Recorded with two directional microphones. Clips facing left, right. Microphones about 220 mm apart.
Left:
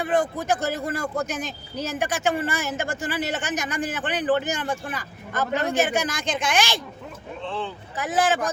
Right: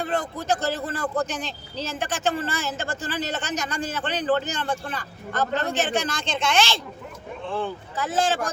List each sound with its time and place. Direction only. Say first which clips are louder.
0.0 s speech: left 4 dB; 15° left (ahead or behind)
6.2 s a woman's voice: even; 25° right (ahead or behind)
6.5 s speech: right 2 dB; 15° left (ahead or behind)
7.4 s speech: right 2 dB; 10° right (ahead or behind)
7.9 s speech: left 2 dB; 15° left (ahead or behind)